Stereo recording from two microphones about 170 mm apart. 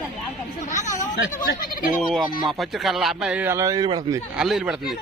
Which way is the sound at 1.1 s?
75° left (ahead or behind).